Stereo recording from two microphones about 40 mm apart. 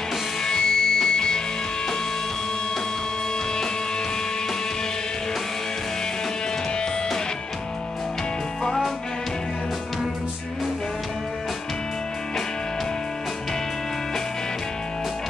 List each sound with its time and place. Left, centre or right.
0.4 s music: centre
8.6 s music: centre